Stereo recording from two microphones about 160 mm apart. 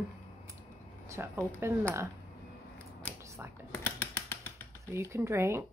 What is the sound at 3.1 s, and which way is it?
Whispering, 15° right (ahead or behind).